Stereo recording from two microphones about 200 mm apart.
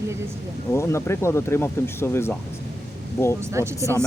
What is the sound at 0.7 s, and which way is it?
Speech, 15° left (ahead or behind).